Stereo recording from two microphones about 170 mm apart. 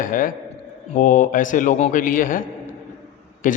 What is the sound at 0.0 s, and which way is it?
A man's voice, 55° left (ahead or behind).